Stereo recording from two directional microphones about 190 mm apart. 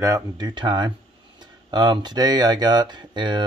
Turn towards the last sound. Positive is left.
turn(degrees=-25)  # may be behind; listen again after turning